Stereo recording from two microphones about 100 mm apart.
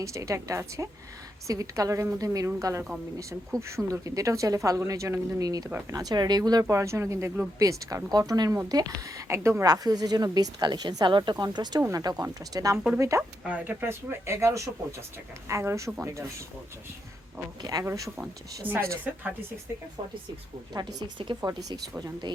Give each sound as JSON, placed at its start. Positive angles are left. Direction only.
{"t": 0.0, "sound": "speech", "side_deg": -30}
{"t": 9.6, "sound": "a woman's voice", "side_deg": -40}
{"t": 12.7, "sound": "speech", "side_deg": -10}
{"t": 13.0, "sound": "speech", "side_deg": -30}
{"t": 17.6, "sound": "speech", "side_deg": -40}
{"t": 18.7, "sound": "speech", "side_deg": -20}
{"t": 20.7, "sound": "a woman's voice", "side_deg": -55}